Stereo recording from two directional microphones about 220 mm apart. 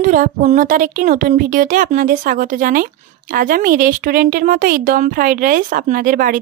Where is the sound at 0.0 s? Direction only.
35° right (ahead or behind).